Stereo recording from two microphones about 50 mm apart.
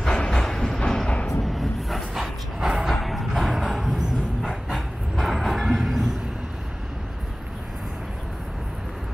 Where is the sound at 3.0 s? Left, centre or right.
Centre.